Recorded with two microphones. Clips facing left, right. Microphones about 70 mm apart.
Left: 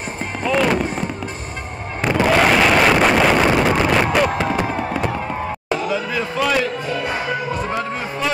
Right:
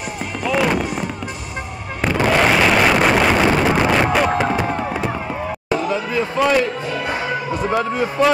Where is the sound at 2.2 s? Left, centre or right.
Centre.